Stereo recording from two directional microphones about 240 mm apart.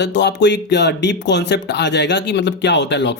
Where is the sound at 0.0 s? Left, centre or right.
Left.